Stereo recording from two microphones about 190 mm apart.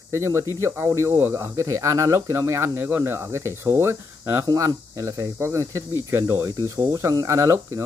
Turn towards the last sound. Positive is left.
turn(degrees=-15)  # may be behind; listen again after turning